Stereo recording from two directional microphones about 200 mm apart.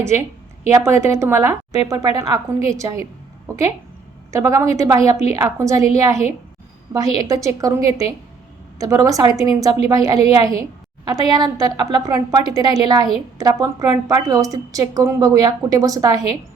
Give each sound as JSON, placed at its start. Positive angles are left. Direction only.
{"t": 0.0, "sound": "a woman's voice", "side_deg": -15}
{"t": 3.5, "sound": "a sound", "side_deg": -15}
{"t": 4.3, "sound": "a woman's voice", "side_deg": -15}